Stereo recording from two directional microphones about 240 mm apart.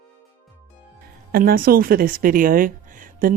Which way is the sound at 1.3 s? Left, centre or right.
Right.